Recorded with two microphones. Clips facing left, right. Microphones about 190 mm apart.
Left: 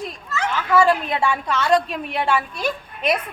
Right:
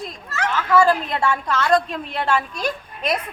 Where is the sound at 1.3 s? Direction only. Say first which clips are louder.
Right 1 dB; 10° left (ahead or behind).